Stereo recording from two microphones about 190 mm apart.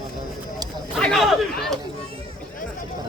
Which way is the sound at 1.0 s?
Centre (ahead or behind).